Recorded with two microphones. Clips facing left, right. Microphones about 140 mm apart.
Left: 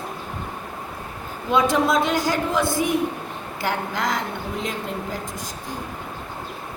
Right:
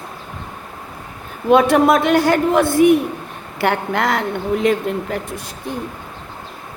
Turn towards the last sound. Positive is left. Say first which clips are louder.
# right 9 dB
turn(degrees=-65)  # may be behind; listen again after turning